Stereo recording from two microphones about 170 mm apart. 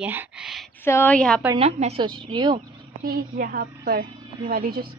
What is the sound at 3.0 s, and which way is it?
A woman's voice, 65° right (ahead or behind).